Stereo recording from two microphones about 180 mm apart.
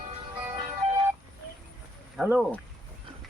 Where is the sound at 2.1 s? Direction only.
5° right (ahead or behind).